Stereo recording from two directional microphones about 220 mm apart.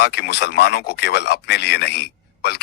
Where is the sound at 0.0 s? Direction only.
45° left (ahead or behind).